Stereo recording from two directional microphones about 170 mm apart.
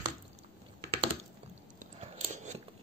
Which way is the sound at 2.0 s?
45° right (ahead or behind).